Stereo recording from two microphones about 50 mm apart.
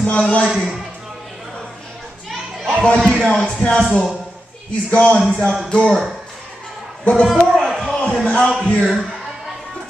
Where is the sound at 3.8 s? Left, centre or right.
Centre.